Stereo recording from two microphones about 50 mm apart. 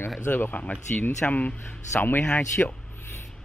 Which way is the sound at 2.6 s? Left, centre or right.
Left.